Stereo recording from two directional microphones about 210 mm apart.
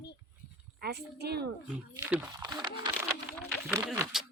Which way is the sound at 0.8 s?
50° right (ahead or behind).